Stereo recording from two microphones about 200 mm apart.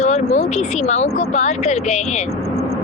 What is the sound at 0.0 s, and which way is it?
Speech, 35° left (ahead or behind).